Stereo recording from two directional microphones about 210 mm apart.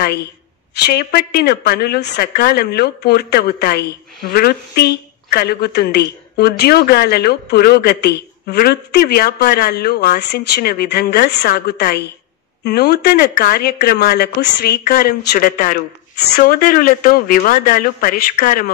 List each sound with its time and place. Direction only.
0.7 s a woman's voice: 50° left (ahead or behind)